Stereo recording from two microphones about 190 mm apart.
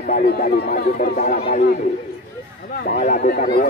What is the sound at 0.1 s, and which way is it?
Speech, 50° left (ahead or behind).